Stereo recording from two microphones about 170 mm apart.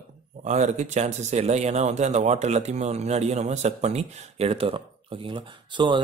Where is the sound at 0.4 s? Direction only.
45° right (ahead or behind).